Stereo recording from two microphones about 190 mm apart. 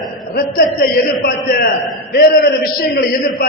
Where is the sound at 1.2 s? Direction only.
55° left (ahead or behind).